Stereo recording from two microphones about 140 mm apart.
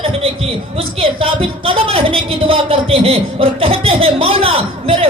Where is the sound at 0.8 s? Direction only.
40° right (ahead or behind).